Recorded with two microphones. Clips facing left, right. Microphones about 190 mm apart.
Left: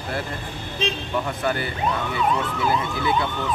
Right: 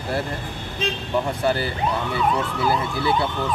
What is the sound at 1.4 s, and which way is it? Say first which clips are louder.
Speech: right 3 dB; 35° right (ahead or behind).